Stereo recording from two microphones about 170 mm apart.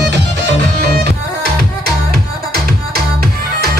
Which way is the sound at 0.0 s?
90° right.